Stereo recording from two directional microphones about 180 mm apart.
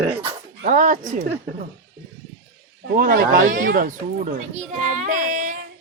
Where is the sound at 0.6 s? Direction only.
45° right (ahead or behind).